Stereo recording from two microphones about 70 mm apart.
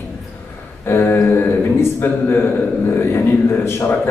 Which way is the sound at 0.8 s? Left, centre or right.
Left.